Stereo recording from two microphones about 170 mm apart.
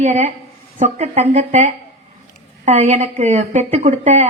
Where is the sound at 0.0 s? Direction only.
45° right (ahead or behind).